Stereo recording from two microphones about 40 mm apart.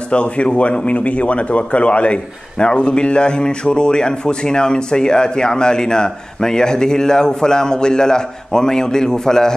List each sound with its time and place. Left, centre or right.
0.1 s speech: left